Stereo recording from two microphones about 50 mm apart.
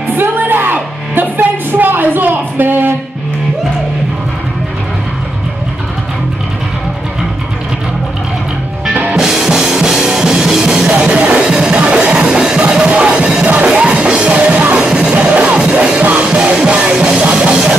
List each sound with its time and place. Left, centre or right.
0.1 s music: right
1.1 s a sound: right
9.1 s drum kit: centre
11.1 s music: right
11.3 s music: centre